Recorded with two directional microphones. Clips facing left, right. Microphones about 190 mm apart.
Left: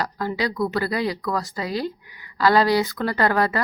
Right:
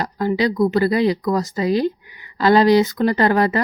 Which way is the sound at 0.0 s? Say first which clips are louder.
Right 6 dB; 20° right (ahead or behind).